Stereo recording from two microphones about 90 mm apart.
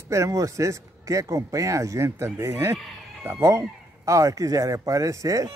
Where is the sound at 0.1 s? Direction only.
35° right (ahead or behind).